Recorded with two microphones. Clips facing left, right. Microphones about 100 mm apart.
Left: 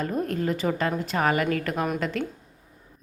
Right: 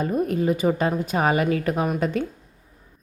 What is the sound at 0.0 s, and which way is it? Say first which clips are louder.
Speech: right 4 dB; 15° right (ahead or behind).